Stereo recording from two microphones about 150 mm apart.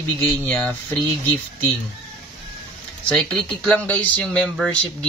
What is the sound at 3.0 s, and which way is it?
Speech, 5° left (ahead or behind).